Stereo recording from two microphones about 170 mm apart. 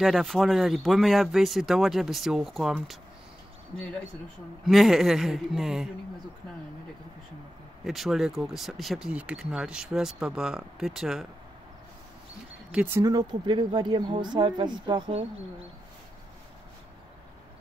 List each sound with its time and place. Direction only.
0.0 s speech: centre (ahead or behind)
4.6 s speech: centre (ahead or behind)
7.8 s speech: centre (ahead or behind)
12.7 s speech: 10° right (ahead or behind)
13.0 s speech: 25° right (ahead or behind)